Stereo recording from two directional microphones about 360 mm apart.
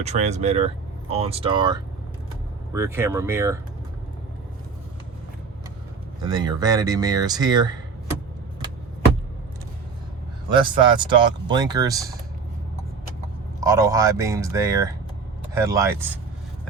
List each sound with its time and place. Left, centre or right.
0.0 s speech: centre
6.2 s speech: centre
10.5 s speech: centre
13.6 s speech: centre